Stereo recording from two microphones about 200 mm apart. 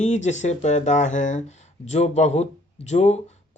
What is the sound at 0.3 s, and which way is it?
Speech, 35° left (ahead or behind).